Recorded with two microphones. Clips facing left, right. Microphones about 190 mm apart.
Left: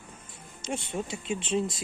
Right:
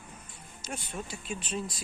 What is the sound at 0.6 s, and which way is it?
Speech, 25° left (ahead or behind).